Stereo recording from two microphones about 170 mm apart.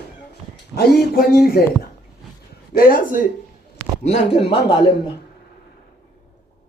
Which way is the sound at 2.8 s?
60° left (ahead or behind).